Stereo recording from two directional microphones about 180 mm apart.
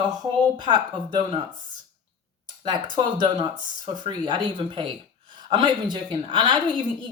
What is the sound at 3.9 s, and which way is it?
A woman's voice, 25° right (ahead or behind).